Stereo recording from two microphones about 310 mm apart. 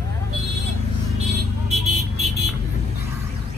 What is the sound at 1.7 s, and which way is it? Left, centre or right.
Vehicle, right.